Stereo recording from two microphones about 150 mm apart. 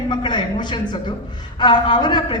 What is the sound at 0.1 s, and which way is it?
A man's voice, 30° left (ahead or behind).